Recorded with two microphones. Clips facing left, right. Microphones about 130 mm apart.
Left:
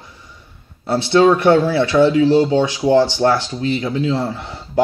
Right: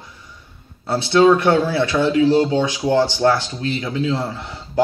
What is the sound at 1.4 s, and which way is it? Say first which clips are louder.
Speech: left 3 dB; 25° left (ahead or behind).